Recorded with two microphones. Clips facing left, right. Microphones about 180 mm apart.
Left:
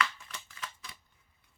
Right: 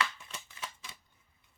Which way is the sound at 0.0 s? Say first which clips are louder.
Left 2 dB; 20° right (ahead or behind).